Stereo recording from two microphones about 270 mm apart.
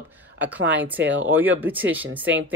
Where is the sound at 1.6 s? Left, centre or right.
Centre.